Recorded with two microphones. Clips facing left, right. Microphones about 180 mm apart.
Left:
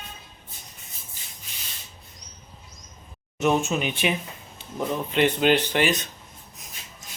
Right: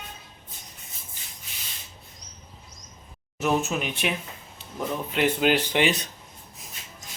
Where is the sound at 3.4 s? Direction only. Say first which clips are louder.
Left 2 dB; centre (ahead or behind).